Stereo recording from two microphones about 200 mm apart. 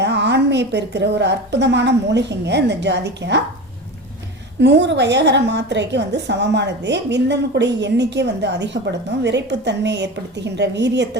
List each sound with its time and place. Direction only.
0.0 s a woman's voice: 60° right (ahead or behind)
4.6 s a woman's voice: 60° right (ahead or behind)